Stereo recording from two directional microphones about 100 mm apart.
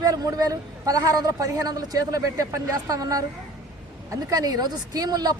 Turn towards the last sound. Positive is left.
turn(degrees=-40)  # may be behind; listen again after turning